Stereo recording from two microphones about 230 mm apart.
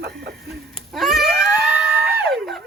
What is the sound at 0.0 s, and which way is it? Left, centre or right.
Speech, right.